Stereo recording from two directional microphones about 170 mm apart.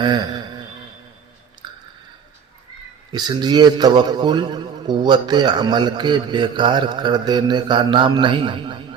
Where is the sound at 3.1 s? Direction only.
25° right (ahead or behind).